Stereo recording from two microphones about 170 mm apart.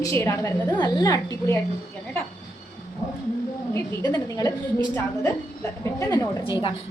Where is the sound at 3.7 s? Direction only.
15° left (ahead or behind).